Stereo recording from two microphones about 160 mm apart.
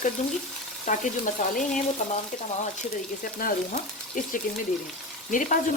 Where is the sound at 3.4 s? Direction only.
60° left (ahead or behind).